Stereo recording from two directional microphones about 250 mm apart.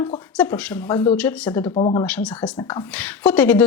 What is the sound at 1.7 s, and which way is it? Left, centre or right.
Speech, left.